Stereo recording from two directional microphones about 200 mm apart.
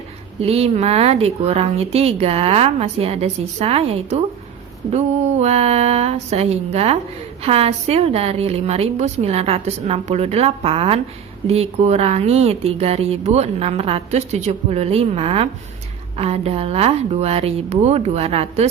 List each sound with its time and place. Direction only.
0.3 s speech: 30° right (ahead or behind)
5.4 s speech: 30° right (ahead or behind)